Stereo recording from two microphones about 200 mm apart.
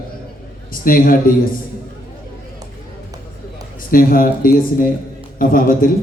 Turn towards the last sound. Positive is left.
turn(degrees=45)  # may be behind; listen again after turning